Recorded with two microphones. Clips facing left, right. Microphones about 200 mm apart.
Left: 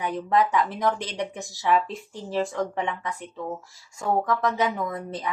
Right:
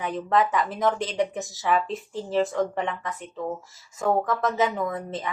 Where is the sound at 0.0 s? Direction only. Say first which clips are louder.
Even; centre (ahead or behind).